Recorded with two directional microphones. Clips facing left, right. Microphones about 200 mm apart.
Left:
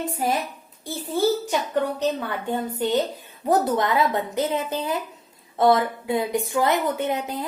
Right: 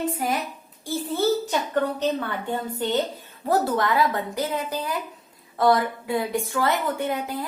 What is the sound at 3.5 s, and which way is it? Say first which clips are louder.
A woman's voice: left 1 dB; 20° left (ahead or behind).